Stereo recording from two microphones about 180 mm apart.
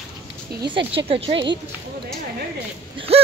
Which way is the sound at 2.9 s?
35° right (ahead or behind).